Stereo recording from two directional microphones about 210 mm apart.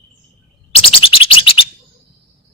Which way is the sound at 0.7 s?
25° left (ahead or behind).